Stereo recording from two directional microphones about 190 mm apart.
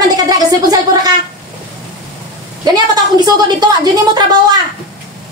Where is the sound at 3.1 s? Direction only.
20° right (ahead or behind).